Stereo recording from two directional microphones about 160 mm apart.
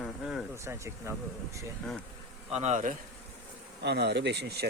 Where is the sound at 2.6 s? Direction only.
45° right (ahead or behind).